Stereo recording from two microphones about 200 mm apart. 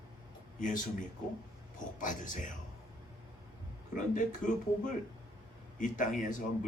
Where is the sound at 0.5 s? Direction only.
40° left (ahead or behind).